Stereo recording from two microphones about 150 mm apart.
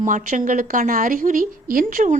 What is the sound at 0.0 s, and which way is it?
A woman's voice, 60° right (ahead or behind).